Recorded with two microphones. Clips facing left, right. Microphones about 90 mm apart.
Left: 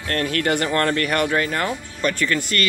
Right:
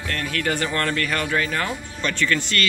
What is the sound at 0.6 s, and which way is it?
Speech, 30° left (ahead or behind).